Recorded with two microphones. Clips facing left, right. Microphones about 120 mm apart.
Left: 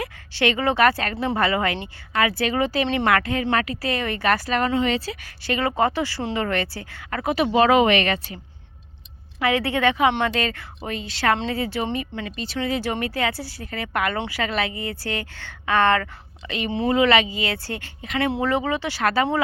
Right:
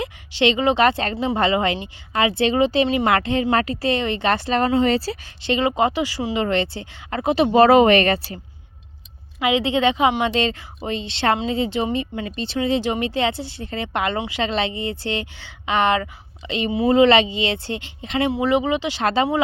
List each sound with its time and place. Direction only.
0.0 s a woman's voice: 20° right (ahead or behind)
7.5 s speech: 35° right (ahead or behind)
9.4 s a woman's voice: 20° right (ahead or behind)